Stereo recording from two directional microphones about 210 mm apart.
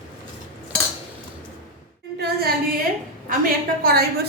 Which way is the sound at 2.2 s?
45° right (ahead or behind).